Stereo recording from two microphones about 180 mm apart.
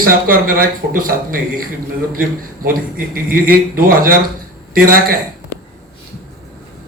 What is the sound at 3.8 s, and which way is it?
A man's voice, 50° right (ahead or behind).